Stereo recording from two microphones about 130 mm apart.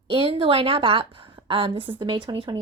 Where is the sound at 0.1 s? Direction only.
45° right (ahead or behind).